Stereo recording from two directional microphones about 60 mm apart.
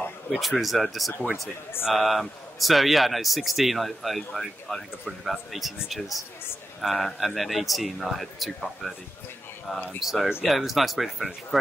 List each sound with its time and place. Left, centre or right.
0.3 s a man's voice: centre
10.0 s a man's voice: centre